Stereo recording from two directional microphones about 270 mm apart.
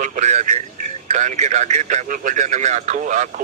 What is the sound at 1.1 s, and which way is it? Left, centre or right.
Speech, right.